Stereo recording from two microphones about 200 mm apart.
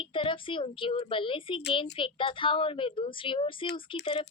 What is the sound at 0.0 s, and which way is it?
A woman's voice, 25° left (ahead or behind).